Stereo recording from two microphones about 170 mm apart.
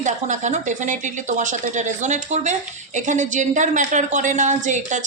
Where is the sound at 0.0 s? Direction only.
45° right (ahead or behind).